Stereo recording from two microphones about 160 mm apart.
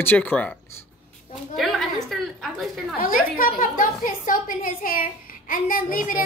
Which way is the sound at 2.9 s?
60° left (ahead or behind).